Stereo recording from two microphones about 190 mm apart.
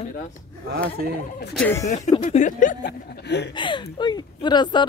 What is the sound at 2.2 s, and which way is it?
Speech, 40° left (ahead or behind).